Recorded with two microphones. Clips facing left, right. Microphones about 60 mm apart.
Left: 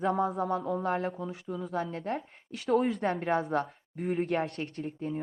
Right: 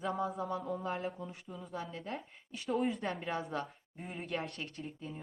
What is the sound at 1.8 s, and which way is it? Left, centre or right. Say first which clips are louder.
Speech: left 7 dB; left.